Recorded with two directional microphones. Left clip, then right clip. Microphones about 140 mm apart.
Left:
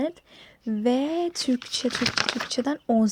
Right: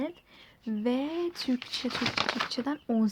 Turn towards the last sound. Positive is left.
turn(degrees=30)  # may be behind; listen again after turning